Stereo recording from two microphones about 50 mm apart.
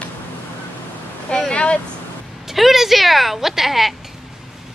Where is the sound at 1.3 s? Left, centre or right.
Centre.